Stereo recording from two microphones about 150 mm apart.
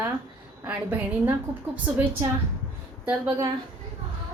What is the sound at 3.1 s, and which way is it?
Speech, 15° right (ahead or behind).